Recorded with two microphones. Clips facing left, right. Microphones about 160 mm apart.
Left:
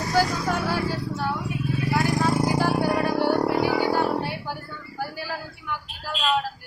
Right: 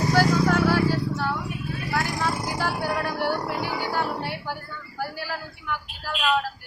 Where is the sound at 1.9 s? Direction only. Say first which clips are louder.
Left 4 dB; 15° left (ahead or behind).